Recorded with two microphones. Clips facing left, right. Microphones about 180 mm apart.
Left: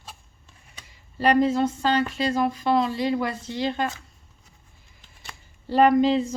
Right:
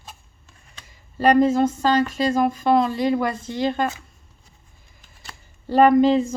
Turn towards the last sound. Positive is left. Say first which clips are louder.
# right 3 dB
turn(degrees=-50)  # may be behind; listen again after turning